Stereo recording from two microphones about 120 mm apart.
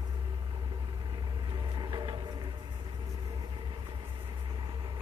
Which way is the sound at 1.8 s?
40° right (ahead or behind).